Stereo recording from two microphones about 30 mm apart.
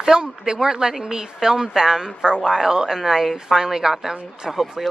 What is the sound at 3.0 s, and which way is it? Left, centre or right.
A woman's voice, centre.